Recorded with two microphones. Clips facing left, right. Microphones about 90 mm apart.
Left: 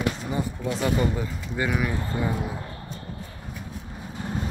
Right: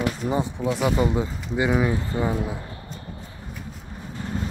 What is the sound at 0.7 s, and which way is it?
Speech, 10° right (ahead or behind).